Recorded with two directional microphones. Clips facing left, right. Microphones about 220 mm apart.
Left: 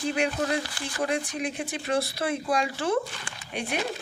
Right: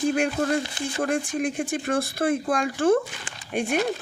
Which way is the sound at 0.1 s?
50° right (ahead or behind).